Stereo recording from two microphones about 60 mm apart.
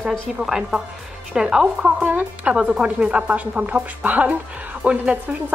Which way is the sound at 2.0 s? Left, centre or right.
Right.